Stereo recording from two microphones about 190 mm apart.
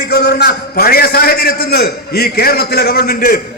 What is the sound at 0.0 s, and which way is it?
A man's voice, 60° left (ahead or behind).